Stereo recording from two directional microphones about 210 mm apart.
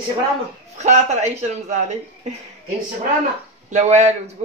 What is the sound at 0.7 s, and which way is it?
A man's voice, 35° right (ahead or behind).